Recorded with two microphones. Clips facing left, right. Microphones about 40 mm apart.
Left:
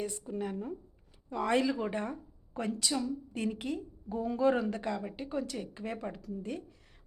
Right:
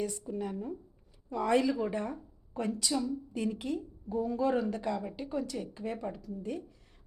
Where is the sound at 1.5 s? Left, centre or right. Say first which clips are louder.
Right 2 dB; left.